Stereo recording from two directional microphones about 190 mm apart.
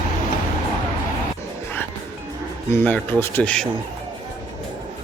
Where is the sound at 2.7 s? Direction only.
10° left (ahead or behind).